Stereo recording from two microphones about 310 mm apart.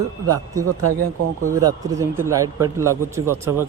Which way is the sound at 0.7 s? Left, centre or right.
Right.